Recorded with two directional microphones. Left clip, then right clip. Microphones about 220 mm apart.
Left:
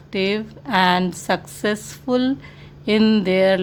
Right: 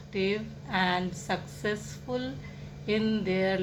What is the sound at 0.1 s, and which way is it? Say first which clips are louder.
A woman's voice: left 8 dB; 55° left (ahead or behind).